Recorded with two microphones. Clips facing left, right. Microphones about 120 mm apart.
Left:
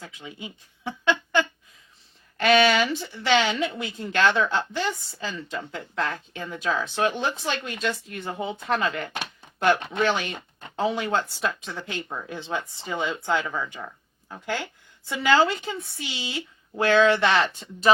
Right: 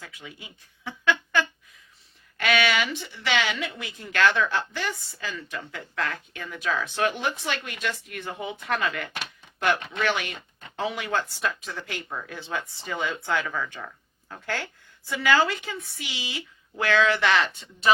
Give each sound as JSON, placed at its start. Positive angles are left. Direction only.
{"t": 0.0, "sound": "a woman's voice", "side_deg": 25}
{"t": 17.5, "sound": "speech", "side_deg": 40}